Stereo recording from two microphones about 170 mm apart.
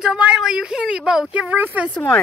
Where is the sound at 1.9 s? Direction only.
5° left (ahead or behind).